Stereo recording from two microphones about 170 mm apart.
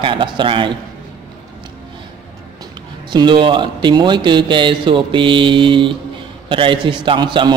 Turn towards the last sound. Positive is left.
turn(degrees=-25)  # may be behind; listen again after turning